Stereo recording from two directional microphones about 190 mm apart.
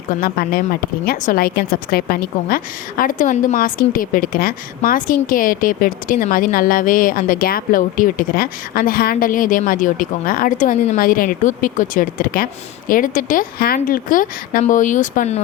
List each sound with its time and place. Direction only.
0.1 s a woman's voice: 50° left (ahead or behind)